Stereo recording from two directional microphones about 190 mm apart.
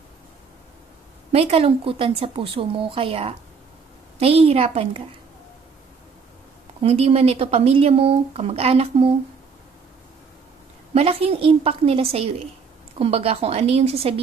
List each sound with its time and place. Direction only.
1.3 s speech: 30° right (ahead or behind)
6.8 s speech: 30° right (ahead or behind)
10.9 s speech: 30° right (ahead or behind)